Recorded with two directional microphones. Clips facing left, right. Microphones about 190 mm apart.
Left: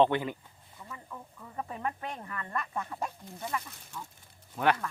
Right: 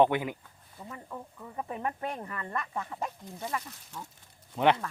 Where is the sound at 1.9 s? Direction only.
25° right (ahead or behind).